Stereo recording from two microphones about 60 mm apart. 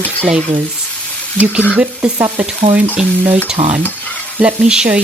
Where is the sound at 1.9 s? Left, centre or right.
Centre.